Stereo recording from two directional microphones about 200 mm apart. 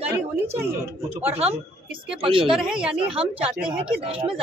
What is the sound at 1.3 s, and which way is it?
Speech, 30° right (ahead or behind).